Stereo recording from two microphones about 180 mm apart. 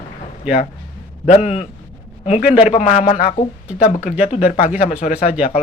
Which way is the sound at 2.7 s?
40° left (ahead or behind).